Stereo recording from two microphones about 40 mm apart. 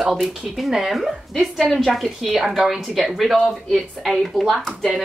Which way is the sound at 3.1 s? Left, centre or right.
Centre.